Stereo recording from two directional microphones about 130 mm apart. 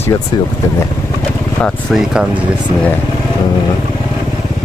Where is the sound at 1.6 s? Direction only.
Centre (ahead or behind).